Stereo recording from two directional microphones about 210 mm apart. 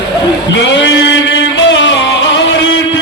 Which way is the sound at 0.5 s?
60° left (ahead or behind).